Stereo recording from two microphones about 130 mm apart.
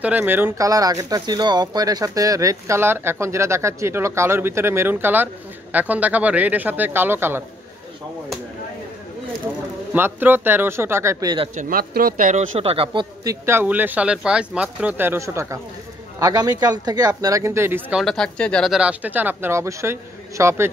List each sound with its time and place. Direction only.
0.0 s speech: 15° right (ahead or behind)
0.7 s speech: 25° right (ahead or behind)
9.9 s speech: 15° right (ahead or behind)
12.1 s speech: 85° right
12.5 s speech: 45° right (ahead or behind)
13.2 s speech: 25° right (ahead or behind)
18.0 s speech: 5° left (ahead or behind)
18.7 s speech: 10° right (ahead or behind)